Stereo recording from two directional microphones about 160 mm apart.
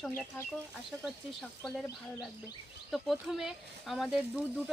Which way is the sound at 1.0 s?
Centre (ahead or behind).